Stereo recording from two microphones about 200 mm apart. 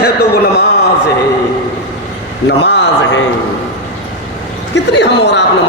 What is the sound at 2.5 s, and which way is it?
Speech, 60° left (ahead or behind).